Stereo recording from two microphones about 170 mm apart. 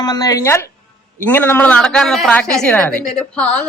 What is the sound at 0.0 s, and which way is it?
A woman's voice, 20° left (ahead or behind).